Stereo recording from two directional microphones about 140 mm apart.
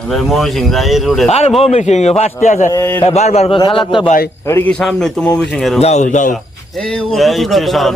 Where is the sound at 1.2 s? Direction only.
50° left (ahead or behind).